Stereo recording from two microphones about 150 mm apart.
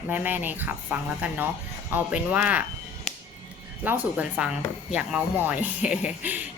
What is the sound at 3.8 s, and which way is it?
A woman's voice, 10° right (ahead or behind).